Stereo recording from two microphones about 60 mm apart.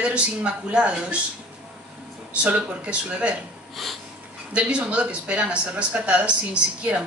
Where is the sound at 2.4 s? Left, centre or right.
Centre.